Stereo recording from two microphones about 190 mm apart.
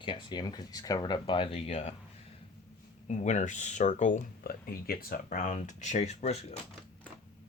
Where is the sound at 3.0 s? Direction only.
40° left (ahead or behind).